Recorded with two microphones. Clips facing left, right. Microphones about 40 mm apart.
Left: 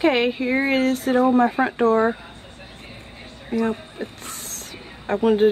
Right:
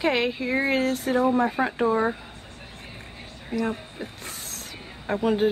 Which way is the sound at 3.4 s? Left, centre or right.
Centre.